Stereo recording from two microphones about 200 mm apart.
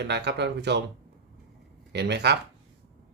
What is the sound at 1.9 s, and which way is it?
Speech, 55° right (ahead or behind).